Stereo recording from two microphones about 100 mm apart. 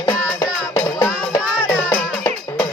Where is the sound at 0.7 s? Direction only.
35° left (ahead or behind).